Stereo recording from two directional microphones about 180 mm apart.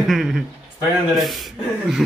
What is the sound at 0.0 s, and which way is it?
A man's voice, centre (ahead or behind).